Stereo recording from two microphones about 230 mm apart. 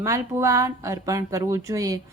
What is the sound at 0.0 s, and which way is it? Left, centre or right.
A woman's voice, centre.